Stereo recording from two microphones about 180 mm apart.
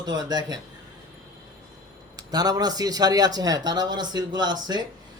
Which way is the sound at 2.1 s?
20° right (ahead or behind).